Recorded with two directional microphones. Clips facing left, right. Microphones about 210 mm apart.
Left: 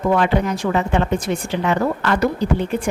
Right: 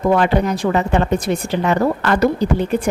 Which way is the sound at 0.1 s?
40° right (ahead or behind).